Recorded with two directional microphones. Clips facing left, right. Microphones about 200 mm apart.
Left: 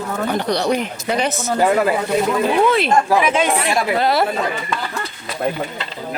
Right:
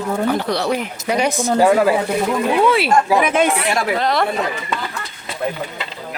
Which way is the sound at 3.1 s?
55° right (ahead or behind).